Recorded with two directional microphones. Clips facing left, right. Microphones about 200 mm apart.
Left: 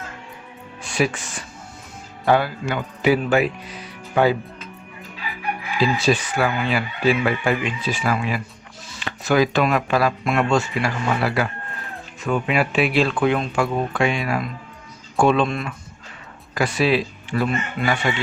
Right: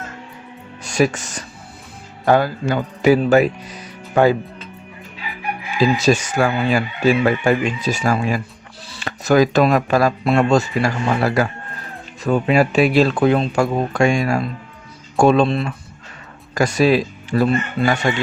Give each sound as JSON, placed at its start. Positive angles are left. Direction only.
{"t": 0.8, "sound": "speech", "side_deg": -40}
{"t": 5.8, "sound": "speech", "side_deg": -45}
{"t": 16.6, "sound": "speech", "side_deg": -40}